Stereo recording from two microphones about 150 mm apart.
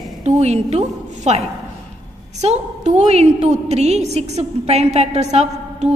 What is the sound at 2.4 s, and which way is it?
A woman's voice, 45° right (ahead or behind).